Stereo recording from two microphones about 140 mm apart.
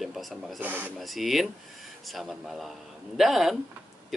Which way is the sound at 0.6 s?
15° right (ahead or behind).